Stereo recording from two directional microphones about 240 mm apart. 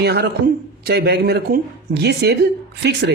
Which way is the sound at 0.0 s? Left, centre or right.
Right.